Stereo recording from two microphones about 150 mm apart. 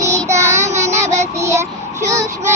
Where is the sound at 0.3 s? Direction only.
20° right (ahead or behind).